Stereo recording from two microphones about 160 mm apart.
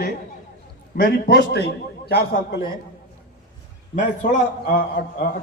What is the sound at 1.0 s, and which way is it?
A man's voice, 65° left (ahead or behind).